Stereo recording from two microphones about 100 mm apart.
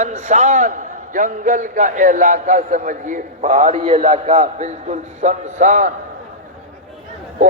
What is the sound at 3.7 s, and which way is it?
Speech, 90° right.